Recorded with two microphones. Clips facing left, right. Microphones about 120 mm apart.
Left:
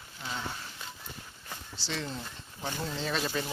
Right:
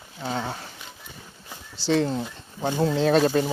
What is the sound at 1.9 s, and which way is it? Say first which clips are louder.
Speech: right 14 dB; 50° right (ahead or behind).